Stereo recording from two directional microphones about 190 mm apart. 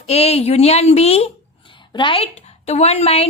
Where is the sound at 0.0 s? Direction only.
35° left (ahead or behind).